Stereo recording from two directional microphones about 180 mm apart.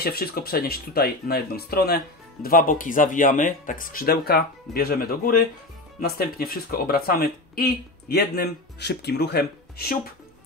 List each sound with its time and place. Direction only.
0.0 s speech: 55° left (ahead or behind)